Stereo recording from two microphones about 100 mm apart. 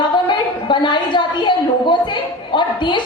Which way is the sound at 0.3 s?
50° left (ahead or behind).